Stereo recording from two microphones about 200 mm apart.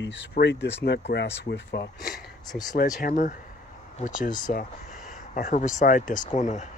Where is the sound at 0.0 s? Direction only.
60° left (ahead or behind).